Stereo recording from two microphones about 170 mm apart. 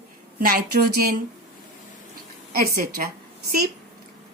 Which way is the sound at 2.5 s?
60° right (ahead or behind).